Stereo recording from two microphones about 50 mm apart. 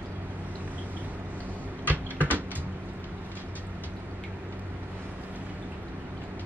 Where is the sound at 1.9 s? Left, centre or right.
Right.